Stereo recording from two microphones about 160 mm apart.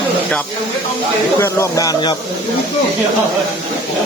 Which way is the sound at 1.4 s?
15° left (ahead or behind).